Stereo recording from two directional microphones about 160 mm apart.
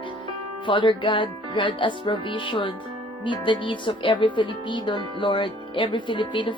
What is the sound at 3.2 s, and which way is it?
Speech, 30° left (ahead or behind).